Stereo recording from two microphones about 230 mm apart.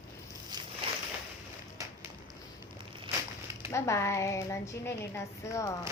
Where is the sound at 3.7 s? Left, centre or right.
Centre.